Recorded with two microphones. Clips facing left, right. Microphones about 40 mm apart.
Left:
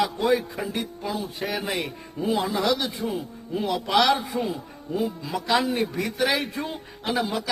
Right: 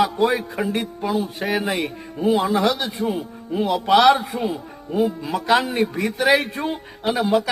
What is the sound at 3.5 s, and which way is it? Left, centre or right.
Speech, right.